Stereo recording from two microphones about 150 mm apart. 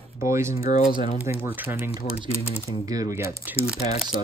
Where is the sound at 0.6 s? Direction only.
65° left (ahead or behind).